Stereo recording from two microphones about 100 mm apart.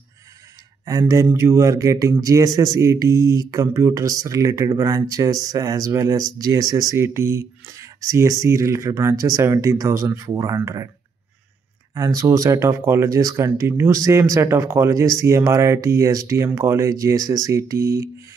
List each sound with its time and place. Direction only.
0.8 s speech: 35° right (ahead or behind)
11.9 s speech: 35° right (ahead or behind)